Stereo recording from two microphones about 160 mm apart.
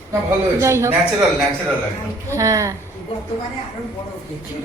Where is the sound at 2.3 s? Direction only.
20° right (ahead or behind).